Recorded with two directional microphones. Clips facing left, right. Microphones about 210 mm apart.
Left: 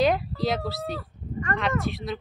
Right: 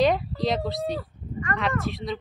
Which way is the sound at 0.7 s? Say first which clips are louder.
Right 3 dB; centre (ahead or behind).